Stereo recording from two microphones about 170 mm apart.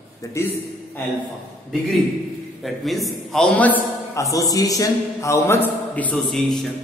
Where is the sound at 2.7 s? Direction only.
Centre (ahead or behind).